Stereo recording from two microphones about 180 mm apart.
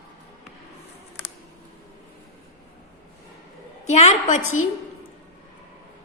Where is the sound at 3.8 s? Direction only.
40° left (ahead or behind).